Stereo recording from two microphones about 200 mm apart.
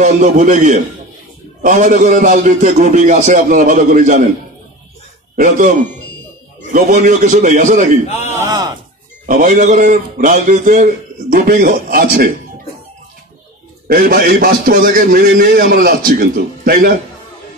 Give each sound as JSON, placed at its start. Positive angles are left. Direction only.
{"t": 0.0, "sound": "a man's voice", "side_deg": -40}
{"t": 5.3, "sound": "a man's voice", "side_deg": -40}
{"t": 6.7, "sound": "a man's voice", "side_deg": -40}
{"t": 8.3, "sound": "speech", "side_deg": -15}
{"t": 9.2, "sound": "a man's voice", "side_deg": -40}
{"t": 13.8, "sound": "a man's voice", "side_deg": -45}